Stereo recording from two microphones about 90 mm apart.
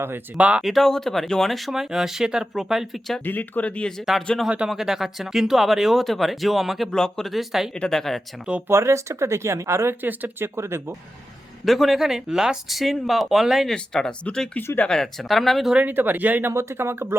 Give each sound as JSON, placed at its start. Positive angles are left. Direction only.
{"t": 0.3, "sound": "speech", "side_deg": -15}
{"t": 0.6, "sound": "speech", "side_deg": 0}
{"t": 3.2, "sound": "speech", "side_deg": 20}
{"t": 4.4, "sound": "speech", "side_deg": -10}
{"t": 8.7, "sound": "speech", "side_deg": -30}
{"t": 11.6, "sound": "speech", "side_deg": 0}
{"t": 13.7, "sound": "speech", "side_deg": 10}
{"t": 15.7, "sound": "speech", "side_deg": -20}